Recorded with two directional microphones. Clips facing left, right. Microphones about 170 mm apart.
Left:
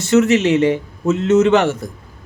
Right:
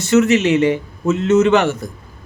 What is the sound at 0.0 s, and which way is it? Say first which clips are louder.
Speech: even; 25° left (ahead or behind).